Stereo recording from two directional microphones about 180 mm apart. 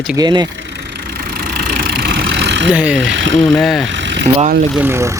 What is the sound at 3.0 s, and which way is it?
Speech, 90° right.